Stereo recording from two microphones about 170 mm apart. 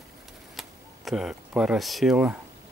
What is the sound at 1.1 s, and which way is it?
Speech, 5° right (ahead or behind).